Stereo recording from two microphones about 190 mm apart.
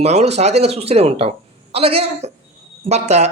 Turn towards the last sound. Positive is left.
turn(degrees=-35)  # may be behind; listen again after turning